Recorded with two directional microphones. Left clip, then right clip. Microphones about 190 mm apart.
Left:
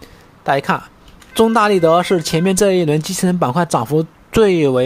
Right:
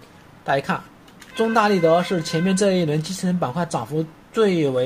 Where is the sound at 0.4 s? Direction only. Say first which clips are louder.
Left 6 dB; 30° left (ahead or behind).